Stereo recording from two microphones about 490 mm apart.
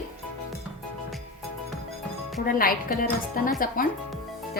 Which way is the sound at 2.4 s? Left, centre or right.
Centre.